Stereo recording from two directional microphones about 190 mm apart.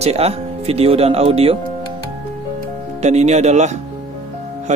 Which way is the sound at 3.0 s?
35° right (ahead or behind).